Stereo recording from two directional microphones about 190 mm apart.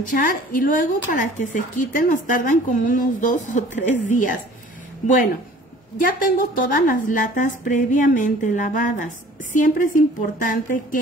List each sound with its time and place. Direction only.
0.1 s a woman's voice: 45° left (ahead or behind)